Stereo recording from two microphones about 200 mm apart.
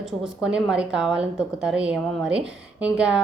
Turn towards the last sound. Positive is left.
turn(degrees=-5)  # may be behind; listen again after turning